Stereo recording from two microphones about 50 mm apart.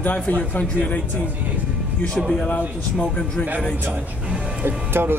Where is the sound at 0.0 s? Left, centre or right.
Left.